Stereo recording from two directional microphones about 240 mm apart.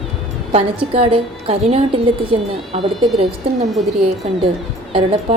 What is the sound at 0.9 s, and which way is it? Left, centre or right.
A woman's voice, right.